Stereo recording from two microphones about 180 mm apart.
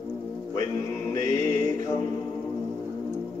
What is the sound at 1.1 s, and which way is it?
Music, 15° left (ahead or behind).